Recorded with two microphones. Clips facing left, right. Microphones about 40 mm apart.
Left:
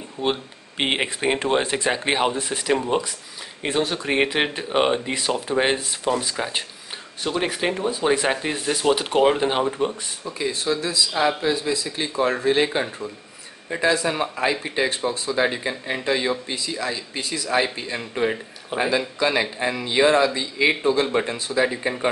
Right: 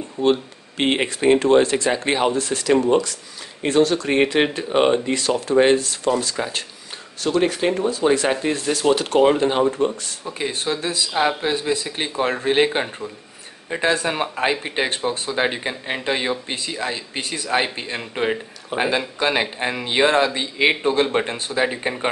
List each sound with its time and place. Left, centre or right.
0.2 s speech: centre
10.2 s speech: right